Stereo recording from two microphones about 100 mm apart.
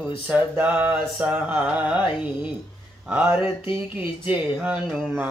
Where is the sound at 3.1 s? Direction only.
15° right (ahead or behind).